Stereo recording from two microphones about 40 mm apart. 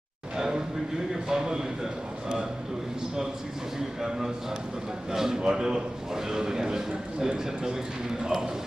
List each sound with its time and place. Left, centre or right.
0.3 s a sound: centre
1.3 s a man's voice: centre
5.1 s a man's voice: centre